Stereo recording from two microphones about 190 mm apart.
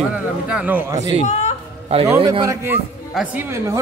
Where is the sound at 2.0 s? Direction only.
15° right (ahead or behind).